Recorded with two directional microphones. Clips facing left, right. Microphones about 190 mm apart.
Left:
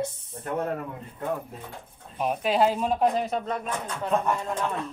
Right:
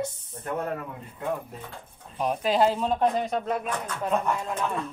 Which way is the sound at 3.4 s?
10° right (ahead or behind).